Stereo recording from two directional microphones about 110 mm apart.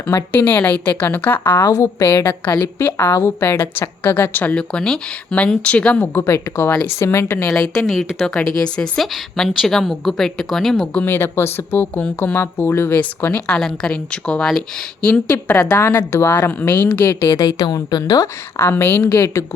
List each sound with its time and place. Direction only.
0.3 s speech: 15° left (ahead or behind)
2.0 s speech: 15° left (ahead or behind)
2.5 s a woman's voice: 30° left (ahead or behind)
2.8 s a woman's voice: 20° left (ahead or behind)
7.5 s a woman's voice: 5° left (ahead or behind)
11.0 s speech: 20° left (ahead or behind)
17.4 s a woman's voice: 35° left (ahead or behind)